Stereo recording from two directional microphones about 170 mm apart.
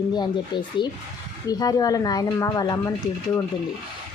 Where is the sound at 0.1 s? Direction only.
25° left (ahead or behind).